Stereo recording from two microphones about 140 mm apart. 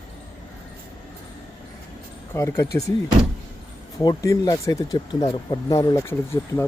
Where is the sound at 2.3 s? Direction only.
20° left (ahead or behind).